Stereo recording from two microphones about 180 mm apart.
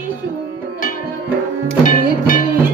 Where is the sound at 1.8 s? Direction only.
50° left (ahead or behind).